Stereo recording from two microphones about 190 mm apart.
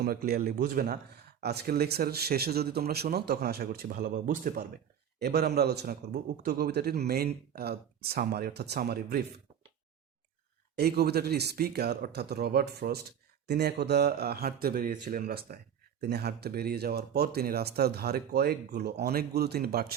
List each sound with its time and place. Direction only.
0.0 s speech: 55° right (ahead or behind)
5.2 s speech: 60° right (ahead or behind)
10.8 s speech: 55° right (ahead or behind)